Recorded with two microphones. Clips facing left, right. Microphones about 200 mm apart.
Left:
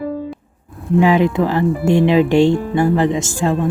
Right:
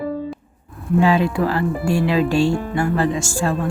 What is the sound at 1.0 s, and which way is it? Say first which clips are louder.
Speech: left 3 dB; 15° left (ahead or behind).